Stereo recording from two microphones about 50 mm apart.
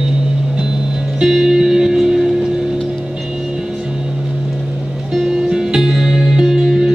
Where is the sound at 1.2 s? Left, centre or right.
Centre.